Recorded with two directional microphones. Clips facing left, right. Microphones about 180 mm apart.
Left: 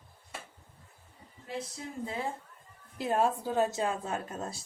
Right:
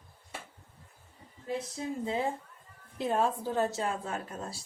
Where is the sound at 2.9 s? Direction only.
5° left (ahead or behind); by 4.6 s 25° left (ahead or behind).